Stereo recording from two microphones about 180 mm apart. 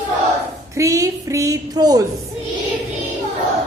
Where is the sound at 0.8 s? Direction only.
15° right (ahead or behind).